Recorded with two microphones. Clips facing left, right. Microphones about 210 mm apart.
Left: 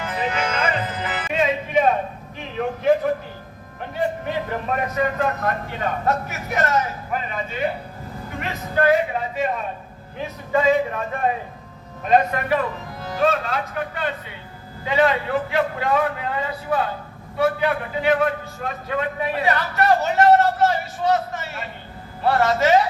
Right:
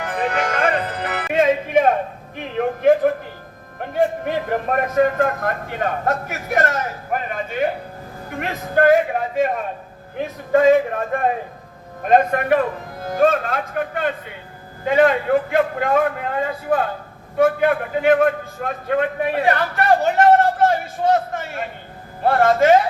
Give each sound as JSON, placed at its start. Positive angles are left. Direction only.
{"t": 0.0, "sound": "music", "side_deg": -50}
{"t": 2.6, "sound": "a sound", "side_deg": -50}
{"t": 3.8, "sound": "a man's voice", "side_deg": -50}